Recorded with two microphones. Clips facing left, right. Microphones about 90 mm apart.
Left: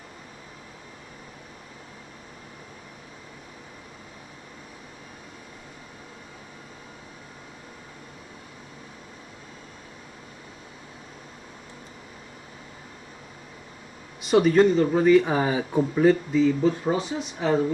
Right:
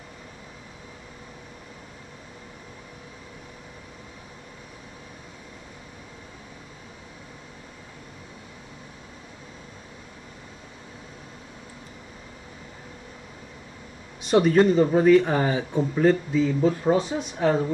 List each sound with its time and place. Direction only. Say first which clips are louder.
14.2 s speech: even; centre (ahead or behind)
15.9 s speech: even; centre (ahead or behind)